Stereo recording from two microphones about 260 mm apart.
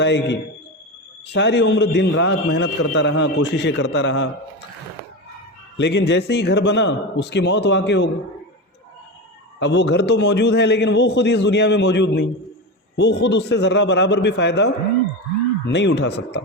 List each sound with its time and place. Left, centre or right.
0.0 s a man's voice: left
5.7 s a man's voice: left
9.6 s a man's voice: left